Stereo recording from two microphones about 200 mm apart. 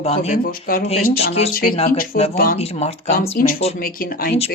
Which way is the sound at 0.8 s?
30° left (ahead or behind).